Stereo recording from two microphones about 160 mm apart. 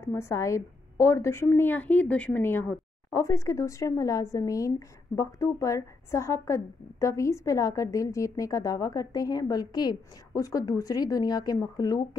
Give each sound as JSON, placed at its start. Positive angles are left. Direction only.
{"t": 0.0, "sound": "a woman's voice", "side_deg": 15}